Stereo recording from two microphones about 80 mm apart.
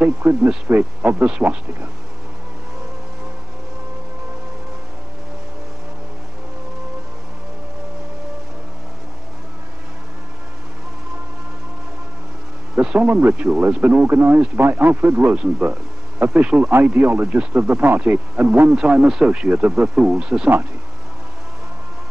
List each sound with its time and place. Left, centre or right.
0.0 s a man's voice: right
12.7 s a man's voice: centre